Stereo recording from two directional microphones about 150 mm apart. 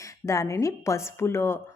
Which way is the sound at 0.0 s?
20° left (ahead or behind).